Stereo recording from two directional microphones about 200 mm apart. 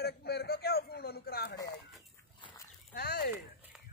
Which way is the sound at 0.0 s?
50° left (ahead or behind).